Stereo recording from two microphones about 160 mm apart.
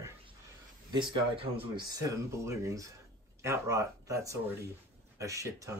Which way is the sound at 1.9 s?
20° right (ahead or behind).